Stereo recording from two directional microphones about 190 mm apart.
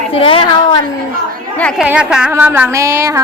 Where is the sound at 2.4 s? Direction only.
10° right (ahead or behind).